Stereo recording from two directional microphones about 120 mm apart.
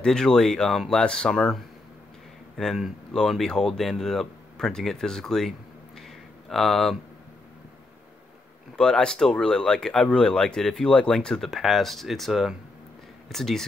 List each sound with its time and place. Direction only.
0.0 s speech: 5° left (ahead or behind)
5.9 s a sound: centre (ahead or behind)
8.7 s speech: 5° left (ahead or behind)